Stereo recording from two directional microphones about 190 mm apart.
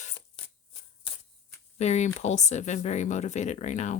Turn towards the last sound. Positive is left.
turn(degrees=40)  # may be behind; listen again after turning